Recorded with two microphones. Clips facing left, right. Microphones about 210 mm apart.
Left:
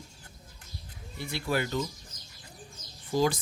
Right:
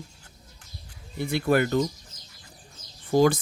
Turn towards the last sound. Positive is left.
turn(degrees=-55)  # may be behind; listen again after turning